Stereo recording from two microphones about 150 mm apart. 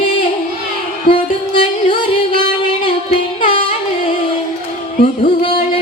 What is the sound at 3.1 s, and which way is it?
Music, 35° left (ahead or behind).